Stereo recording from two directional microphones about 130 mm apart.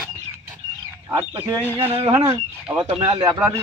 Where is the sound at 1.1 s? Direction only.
20° right (ahead or behind).